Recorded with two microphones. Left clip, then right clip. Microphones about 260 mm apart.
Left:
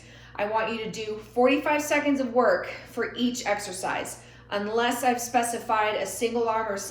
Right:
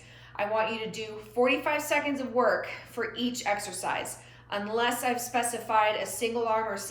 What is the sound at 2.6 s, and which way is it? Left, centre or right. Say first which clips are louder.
A woman's voice: left 3 dB; right.